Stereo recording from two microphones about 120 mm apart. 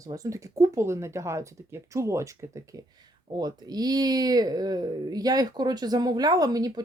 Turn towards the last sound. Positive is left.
turn(degrees=-30)  # may be behind; listen again after turning